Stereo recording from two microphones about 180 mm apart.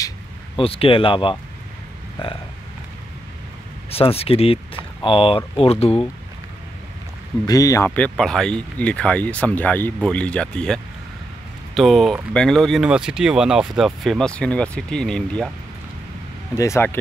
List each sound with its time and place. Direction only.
0.6 s speech: 30° left (ahead or behind)
3.9 s speech: 35° left (ahead or behind)
7.4 s speech: 20° left (ahead or behind)
16.5 s speech: 15° left (ahead or behind)